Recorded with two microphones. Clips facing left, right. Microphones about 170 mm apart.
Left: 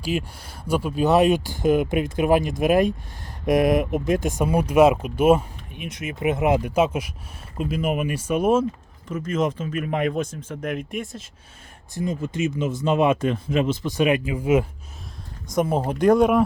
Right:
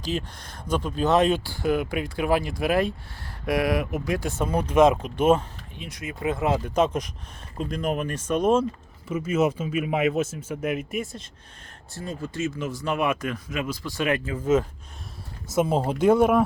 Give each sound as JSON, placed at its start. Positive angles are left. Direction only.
{"t": 0.0, "sound": "speech", "side_deg": 10}
{"t": 9.0, "sound": "speech", "side_deg": -10}
{"t": 11.9, "sound": "speech", "side_deg": 20}
{"t": 16.0, "sound": "speech", "side_deg": -5}